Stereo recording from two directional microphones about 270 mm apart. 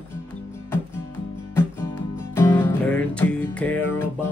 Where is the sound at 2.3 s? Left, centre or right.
Centre.